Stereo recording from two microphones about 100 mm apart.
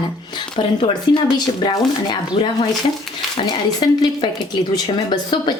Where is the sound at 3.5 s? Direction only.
45° left (ahead or behind).